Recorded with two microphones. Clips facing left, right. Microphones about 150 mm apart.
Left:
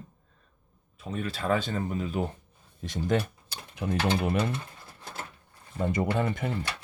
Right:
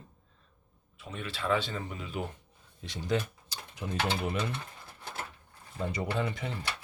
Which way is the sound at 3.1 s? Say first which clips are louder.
Left 3 dB; 60° left (ahead or behind).